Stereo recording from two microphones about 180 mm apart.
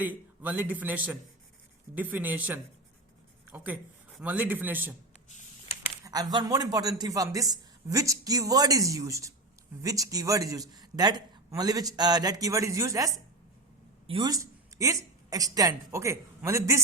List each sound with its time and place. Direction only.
0.0 s a man's voice: 10° right (ahead or behind)
6.1 s a man's voice: 20° right (ahead or behind)
14.1 s a woman's voice: 25° right (ahead or behind)